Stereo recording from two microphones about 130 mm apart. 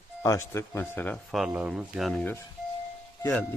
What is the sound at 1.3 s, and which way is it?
Speech, 5° right (ahead or behind).